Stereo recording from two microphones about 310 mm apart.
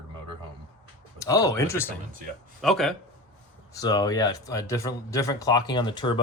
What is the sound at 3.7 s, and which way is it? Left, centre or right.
Speech, centre.